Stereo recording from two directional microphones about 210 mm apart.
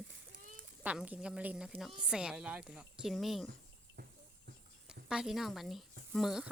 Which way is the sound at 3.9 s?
45° right (ahead or behind).